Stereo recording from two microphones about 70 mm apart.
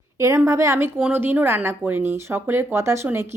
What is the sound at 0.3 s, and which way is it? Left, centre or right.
Speech, right.